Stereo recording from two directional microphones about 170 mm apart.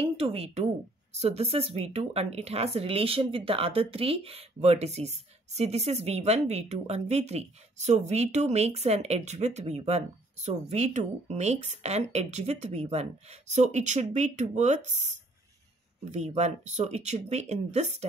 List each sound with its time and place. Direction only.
0.0 s speech: 35° right (ahead or behind)